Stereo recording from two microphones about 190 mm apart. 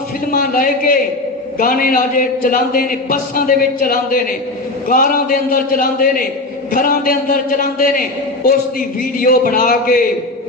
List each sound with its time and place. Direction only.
0.3 s a man's voice: 45° left (ahead or behind)
9.1 s a man's voice: 45° left (ahead or behind)